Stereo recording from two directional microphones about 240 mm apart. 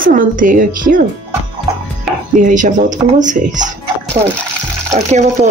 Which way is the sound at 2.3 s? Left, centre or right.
Right.